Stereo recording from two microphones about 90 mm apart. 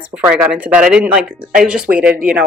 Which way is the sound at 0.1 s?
15° right (ahead or behind).